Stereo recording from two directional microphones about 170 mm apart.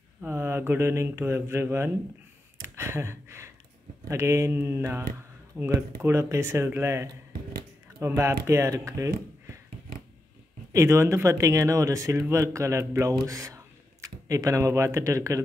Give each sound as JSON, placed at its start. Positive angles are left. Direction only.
{"t": 0.2, "sound": "speech", "side_deg": -15}
{"t": 2.6, "sound": "a sound", "side_deg": -15}
{"t": 4.1, "sound": "speech", "side_deg": -15}
{"t": 10.7, "sound": "speech", "side_deg": -15}